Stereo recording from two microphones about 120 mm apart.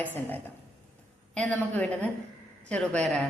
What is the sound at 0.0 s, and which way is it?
A woman's voice, 15° left (ahead or behind).